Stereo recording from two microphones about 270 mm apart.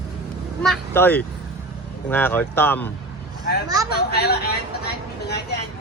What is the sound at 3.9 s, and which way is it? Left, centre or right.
Speech, left.